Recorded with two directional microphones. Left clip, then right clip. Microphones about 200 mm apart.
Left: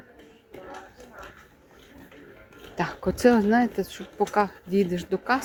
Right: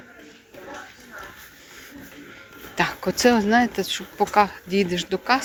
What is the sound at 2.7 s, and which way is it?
Speech, 20° left (ahead or behind).